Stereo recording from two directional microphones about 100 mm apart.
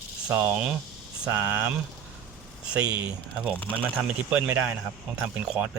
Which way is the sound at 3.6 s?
15° left (ahead or behind).